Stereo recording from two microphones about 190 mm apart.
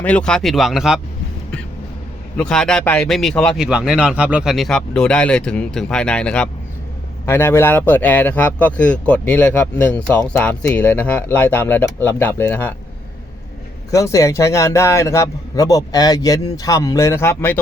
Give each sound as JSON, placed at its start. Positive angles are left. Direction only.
{"t": 0.0, "sound": "speech", "side_deg": 5}
{"t": 2.4, "sound": "a man's voice", "side_deg": 5}
{"t": 13.9, "sound": "a man's voice", "side_deg": 15}